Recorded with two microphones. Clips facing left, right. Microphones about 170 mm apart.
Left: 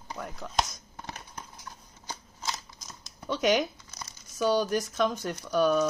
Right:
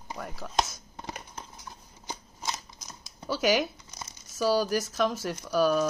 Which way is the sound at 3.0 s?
5° right (ahead or behind).